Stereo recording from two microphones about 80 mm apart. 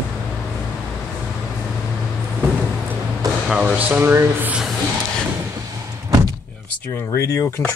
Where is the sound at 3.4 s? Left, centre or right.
Centre.